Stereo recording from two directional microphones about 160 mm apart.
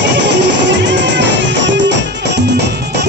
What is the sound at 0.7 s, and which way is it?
Music, 90° right.